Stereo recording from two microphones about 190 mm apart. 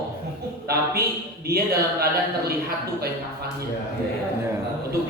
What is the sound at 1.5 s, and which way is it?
Speech, 55° right (ahead or behind).